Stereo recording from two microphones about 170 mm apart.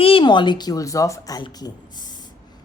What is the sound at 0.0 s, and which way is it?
A woman's voice, 30° left (ahead or behind).